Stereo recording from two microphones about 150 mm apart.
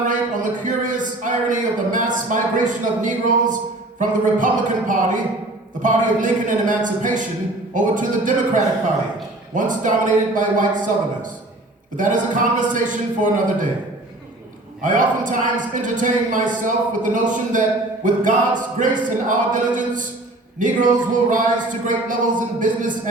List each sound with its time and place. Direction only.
0.0 s a man's voice: 60° right (ahead or behind)
11.9 s speech: 60° right (ahead or behind)
14.8 s speech: 60° right (ahead or behind)